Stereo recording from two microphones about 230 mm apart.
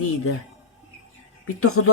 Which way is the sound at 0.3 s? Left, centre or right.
Left.